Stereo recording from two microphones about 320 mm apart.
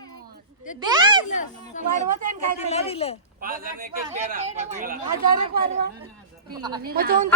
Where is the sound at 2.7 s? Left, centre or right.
Centre.